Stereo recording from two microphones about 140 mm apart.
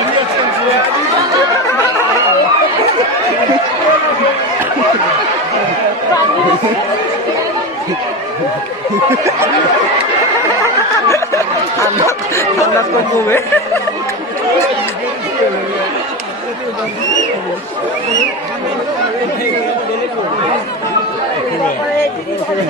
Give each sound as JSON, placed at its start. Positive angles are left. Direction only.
{"t": 10.6, "sound": "snicker", "side_deg": 20}